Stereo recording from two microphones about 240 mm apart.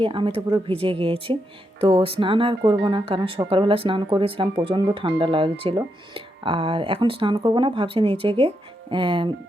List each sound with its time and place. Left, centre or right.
0.0 s speech: right